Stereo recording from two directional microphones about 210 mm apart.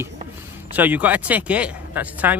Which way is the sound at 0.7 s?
10° right (ahead or behind).